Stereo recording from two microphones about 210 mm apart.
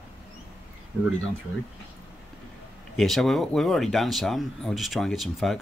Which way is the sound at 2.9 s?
Centre (ahead or behind).